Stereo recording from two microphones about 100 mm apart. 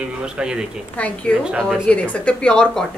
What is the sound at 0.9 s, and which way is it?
Speech, 15° left (ahead or behind).